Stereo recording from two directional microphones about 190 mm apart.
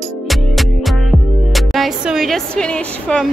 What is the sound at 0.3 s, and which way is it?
Music, centre (ahead or behind).